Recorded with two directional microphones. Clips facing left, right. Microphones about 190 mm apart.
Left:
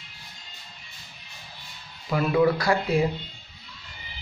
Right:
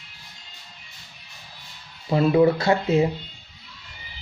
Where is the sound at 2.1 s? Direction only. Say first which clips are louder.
Right 4 dB; 30° right (ahead or behind).